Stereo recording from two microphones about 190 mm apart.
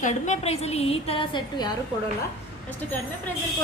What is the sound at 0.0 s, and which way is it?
A woman's voice, 40° left (ahead or behind).